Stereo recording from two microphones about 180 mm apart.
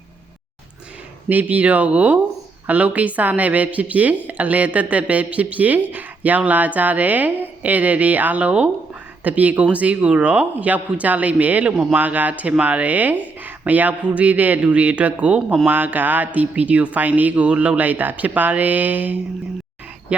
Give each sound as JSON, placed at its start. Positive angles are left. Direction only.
{"t": 1.3, "sound": "speech", "side_deg": -10}